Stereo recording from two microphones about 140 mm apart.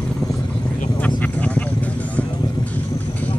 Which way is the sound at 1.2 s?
10° left (ahead or behind).